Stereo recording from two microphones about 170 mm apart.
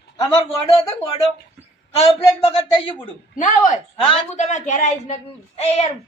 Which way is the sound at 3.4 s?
50° left (ahead or behind).